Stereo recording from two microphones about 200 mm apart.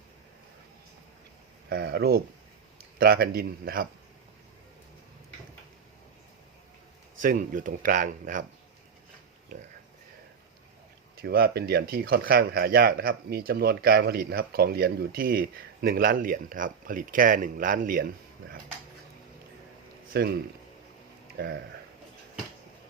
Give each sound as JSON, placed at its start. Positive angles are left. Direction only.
{"t": 1.7, "sound": "speech", "side_deg": -55}
{"t": 7.2, "sound": "speech", "side_deg": -40}
{"t": 9.5, "sound": "speech", "side_deg": -40}
{"t": 11.2, "sound": "speech", "side_deg": -50}
{"t": 20.1, "sound": "speech", "side_deg": -55}
{"t": 21.3, "sound": "speech", "side_deg": -55}